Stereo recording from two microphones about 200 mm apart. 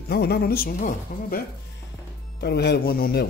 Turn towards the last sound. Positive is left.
turn(degrees=50)  # may be behind; listen again after turning